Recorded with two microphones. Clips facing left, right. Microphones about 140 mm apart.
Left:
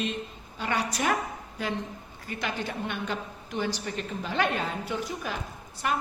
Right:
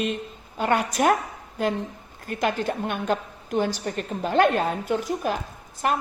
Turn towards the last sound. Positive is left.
turn(degrees=-50)  # may be behind; listen again after turning